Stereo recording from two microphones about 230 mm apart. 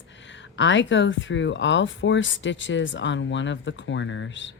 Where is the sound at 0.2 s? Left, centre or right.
Left.